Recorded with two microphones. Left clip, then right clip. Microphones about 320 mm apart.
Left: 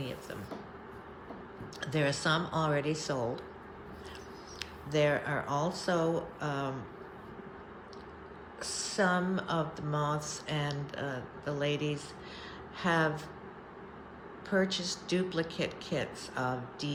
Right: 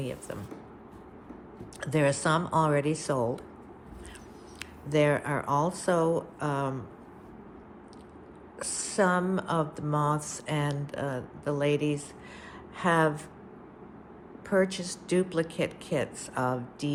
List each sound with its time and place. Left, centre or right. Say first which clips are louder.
1.8 s speech: right 5 dB; right
4.6 s speech: right 4 dB; right
8.5 s speech: right 4 dB; right
14.5 s speech: right 4 dB; right